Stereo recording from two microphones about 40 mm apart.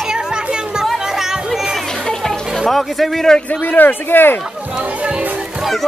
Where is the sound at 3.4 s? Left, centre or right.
Left.